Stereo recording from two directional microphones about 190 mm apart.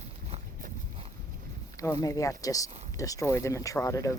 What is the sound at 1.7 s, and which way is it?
Speech, 15° left (ahead or behind).